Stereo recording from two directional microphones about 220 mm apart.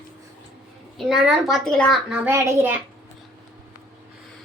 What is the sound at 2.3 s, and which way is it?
Speech, 10° right (ahead or behind).